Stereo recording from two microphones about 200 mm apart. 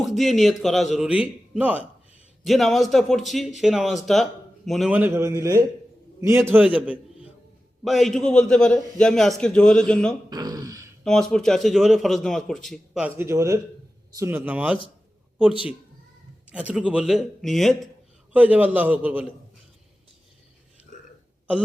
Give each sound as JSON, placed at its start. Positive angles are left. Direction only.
{"t": 0.0, "sound": "a man's voice", "side_deg": 0}
{"t": 10.2, "sound": "a sound", "side_deg": -20}
{"t": 11.0, "sound": "a man's voice", "side_deg": 5}
{"t": 16.5, "sound": "a man's voice", "side_deg": -5}